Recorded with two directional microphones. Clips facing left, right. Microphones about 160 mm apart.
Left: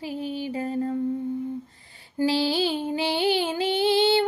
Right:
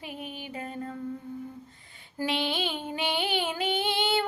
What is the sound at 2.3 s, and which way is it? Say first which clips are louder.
Music: left 6 dB; 35° left (ahead or behind).